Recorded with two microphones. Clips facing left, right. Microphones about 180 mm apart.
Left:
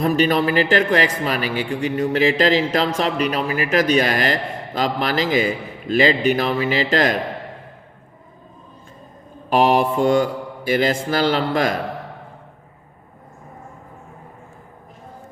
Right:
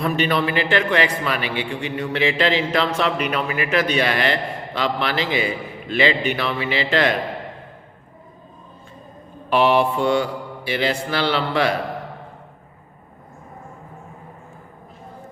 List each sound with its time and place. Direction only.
0.0 s a man's voice: 40° left (ahead or behind)
9.5 s mantra: 40° left (ahead or behind)